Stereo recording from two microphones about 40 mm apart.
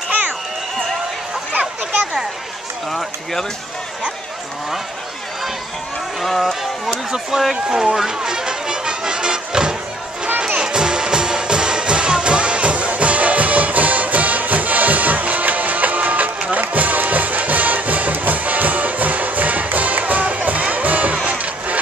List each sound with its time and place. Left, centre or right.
2.9 s speech: centre
6.2 s speech: centre
7.1 s music: centre; by 21.7 s right